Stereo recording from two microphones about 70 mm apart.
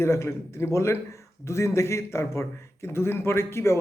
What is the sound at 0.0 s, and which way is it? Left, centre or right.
A man's voice, left.